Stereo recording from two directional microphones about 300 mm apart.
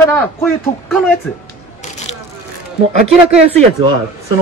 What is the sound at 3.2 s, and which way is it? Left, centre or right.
Speech, centre.